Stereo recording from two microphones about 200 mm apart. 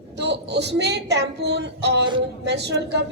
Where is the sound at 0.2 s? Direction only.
60° right (ahead or behind).